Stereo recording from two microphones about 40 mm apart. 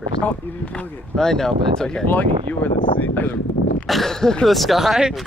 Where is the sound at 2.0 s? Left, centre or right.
Left.